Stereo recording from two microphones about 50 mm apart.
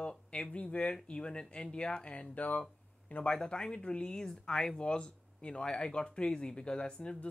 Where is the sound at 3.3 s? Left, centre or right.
Centre.